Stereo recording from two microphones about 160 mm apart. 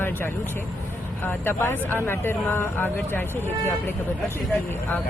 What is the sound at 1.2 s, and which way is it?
Speech, 15° left (ahead or behind).